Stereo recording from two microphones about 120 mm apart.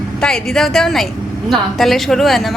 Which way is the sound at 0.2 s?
5° left (ahead or behind).